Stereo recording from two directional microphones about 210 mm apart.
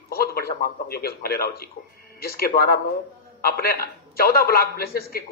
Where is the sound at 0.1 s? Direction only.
45° left (ahead or behind).